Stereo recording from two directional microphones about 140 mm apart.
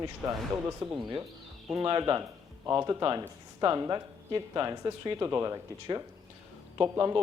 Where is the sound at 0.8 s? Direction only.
40° right (ahead or behind).